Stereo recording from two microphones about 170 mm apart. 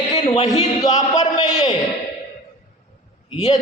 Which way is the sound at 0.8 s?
20° left (ahead or behind).